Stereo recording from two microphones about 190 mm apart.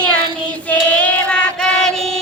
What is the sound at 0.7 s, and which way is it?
Child singing, 5° left (ahead or behind).